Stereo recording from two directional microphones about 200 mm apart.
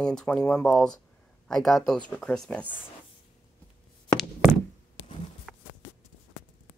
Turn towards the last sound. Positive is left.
turn(degrees=0)  # may be behind; listen again after turning